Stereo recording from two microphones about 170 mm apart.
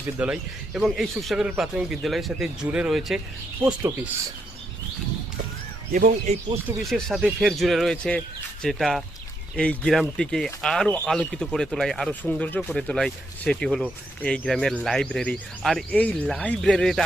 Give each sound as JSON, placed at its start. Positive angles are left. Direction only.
{"t": 0.2, "sound": "speech", "side_deg": -5}
{"t": 5.9, "sound": "speech", "side_deg": -50}
{"t": 6.7, "sound": "speech", "side_deg": 0}